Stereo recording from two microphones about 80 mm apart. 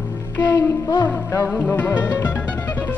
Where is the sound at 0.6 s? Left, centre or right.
Left.